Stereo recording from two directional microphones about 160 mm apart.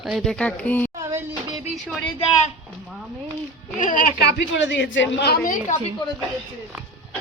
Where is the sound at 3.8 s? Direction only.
55° left (ahead or behind).